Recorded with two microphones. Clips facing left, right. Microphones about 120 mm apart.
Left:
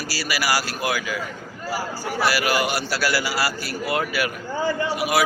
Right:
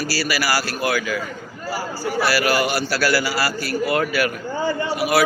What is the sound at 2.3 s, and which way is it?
A man's voice, 20° left (ahead or behind).